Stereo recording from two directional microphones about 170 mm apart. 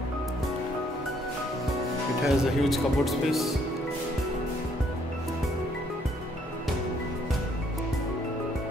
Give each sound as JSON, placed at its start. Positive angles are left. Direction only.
{"t": 2.2, "sound": "speech", "side_deg": 0}